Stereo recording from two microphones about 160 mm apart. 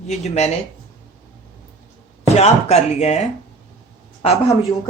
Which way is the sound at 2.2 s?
40° left (ahead or behind).